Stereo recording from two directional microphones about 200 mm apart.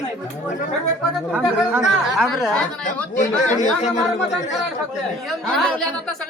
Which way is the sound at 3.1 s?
35° left (ahead or behind).